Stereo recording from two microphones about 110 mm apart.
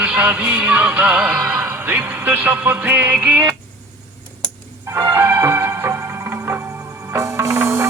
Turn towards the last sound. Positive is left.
turn(degrees=-25)  # may be behind; listen again after turning